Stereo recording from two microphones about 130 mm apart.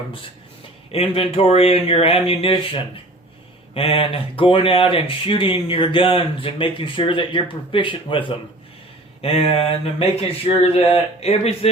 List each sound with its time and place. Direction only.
0.9 s speech: 45° left (ahead or behind)